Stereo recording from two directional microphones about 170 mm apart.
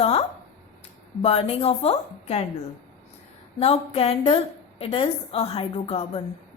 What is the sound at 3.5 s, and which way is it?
A woman's voice, 35° left (ahead or behind).